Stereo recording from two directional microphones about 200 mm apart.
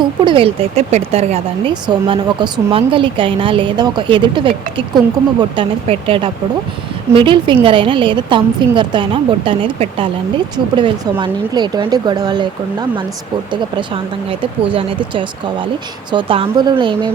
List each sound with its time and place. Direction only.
0.0 s speech: 25° right (ahead or behind)
13.5 s speech: 25° right (ahead or behind)